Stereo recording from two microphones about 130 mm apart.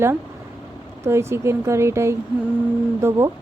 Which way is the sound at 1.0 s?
20° right (ahead or behind).